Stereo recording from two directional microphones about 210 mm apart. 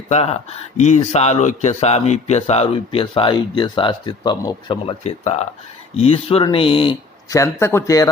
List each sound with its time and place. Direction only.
0.1 s speech: 30° left (ahead or behind)